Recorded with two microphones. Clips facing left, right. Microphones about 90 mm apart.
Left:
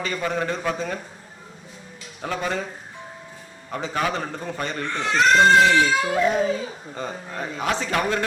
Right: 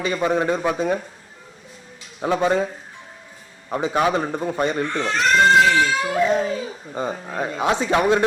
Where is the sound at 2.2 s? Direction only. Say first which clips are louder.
Right 7 dB; 25° right (ahead or behind).